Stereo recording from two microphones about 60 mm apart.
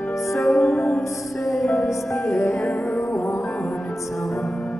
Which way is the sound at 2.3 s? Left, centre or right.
Left.